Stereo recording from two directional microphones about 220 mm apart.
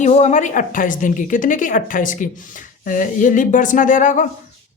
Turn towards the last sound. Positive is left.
turn(degrees=35)  # may be behind; listen again after turning